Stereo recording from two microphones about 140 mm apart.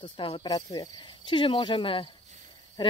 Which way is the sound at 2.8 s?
35° left (ahead or behind).